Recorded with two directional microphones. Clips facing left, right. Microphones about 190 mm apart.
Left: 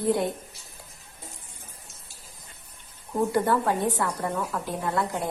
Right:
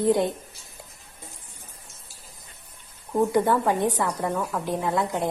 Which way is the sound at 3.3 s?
15° right (ahead or behind).